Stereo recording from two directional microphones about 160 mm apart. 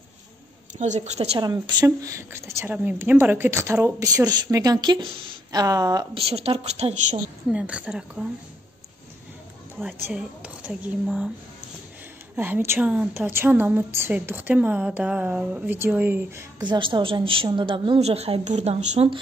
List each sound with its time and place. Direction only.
0.7 s a woman's voice: 45° right (ahead or behind)
1.4 s a woman's voice: 25° right (ahead or behind)
6.2 s a woman's voice: 40° right (ahead or behind)
7.5 s a woman's voice: 10° right (ahead or behind)
10.0 s a woman's voice: 10° right (ahead or behind)
12.4 s a woman's voice: 15° right (ahead or behind)
16.6 s a woman's voice: 30° right (ahead or behind)